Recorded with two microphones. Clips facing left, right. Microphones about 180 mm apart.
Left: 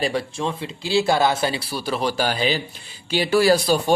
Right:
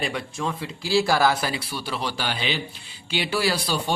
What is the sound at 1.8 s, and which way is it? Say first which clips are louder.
Speech: left 9 dB; 45° left (ahead or behind).